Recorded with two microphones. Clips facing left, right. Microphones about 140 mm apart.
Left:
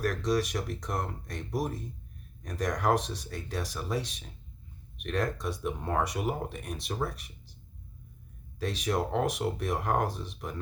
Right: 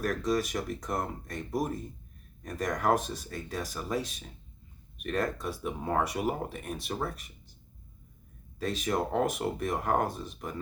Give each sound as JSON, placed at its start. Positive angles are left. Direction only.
{"t": 0.0, "sound": "speech", "side_deg": 0}
{"t": 8.5, "sound": "speech", "side_deg": 0}